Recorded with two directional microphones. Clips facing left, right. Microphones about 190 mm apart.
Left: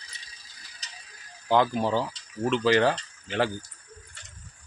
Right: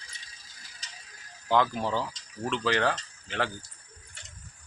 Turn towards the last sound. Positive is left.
turn(degrees=10)  # may be behind; listen again after turning